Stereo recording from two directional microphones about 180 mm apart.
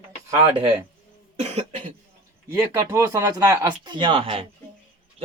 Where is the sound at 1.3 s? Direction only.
35° right (ahead or behind).